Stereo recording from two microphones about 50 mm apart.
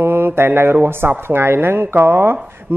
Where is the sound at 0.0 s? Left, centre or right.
Right.